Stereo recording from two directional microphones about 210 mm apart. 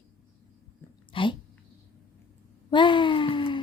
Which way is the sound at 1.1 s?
25° left (ahead or behind).